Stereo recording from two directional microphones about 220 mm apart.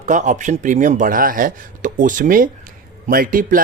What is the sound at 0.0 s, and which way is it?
Speech, 35° right (ahead or behind).